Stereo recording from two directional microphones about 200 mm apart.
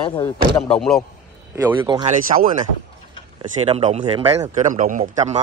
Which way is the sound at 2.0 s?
40° right (ahead or behind).